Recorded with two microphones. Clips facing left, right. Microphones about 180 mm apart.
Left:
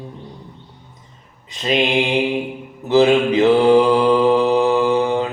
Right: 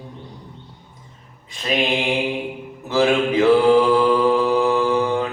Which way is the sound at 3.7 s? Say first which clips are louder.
Left 2 dB; 25° left (ahead or behind).